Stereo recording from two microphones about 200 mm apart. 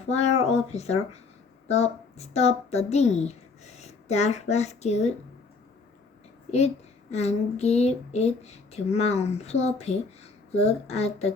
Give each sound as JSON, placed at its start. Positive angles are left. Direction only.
{"t": 0.0, "sound": "a woman's voice", "side_deg": 35}
{"t": 7.1, "sound": "speech", "side_deg": 35}